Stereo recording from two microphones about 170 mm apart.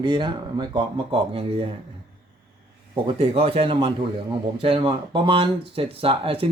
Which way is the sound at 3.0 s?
35° right (ahead or behind).